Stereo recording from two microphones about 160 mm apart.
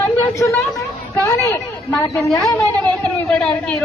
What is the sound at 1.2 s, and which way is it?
A woman's voice, 20° left (ahead or behind).